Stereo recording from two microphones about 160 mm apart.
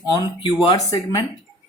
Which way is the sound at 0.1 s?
25° left (ahead or behind).